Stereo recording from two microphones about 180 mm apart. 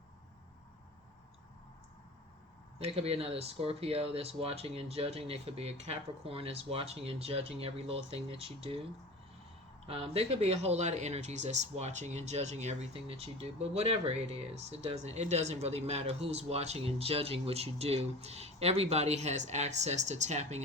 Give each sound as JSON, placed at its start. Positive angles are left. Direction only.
{"t": 2.7, "sound": "speech", "side_deg": -35}
{"t": 9.8, "sound": "speech", "side_deg": -35}